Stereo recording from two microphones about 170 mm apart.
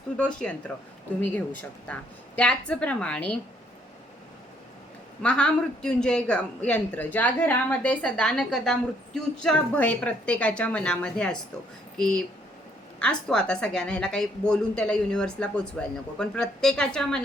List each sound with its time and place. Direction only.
0.2 s a woman's voice: 5° left (ahead or behind)
1.9 s a woman's voice: 5° left (ahead or behind)
5.2 s a woman's voice: 5° left (ahead or behind)